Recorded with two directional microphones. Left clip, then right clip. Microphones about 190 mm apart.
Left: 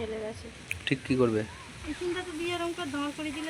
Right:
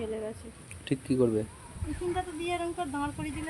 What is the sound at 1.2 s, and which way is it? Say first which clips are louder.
Speech: even; 10° right (ahead or behind).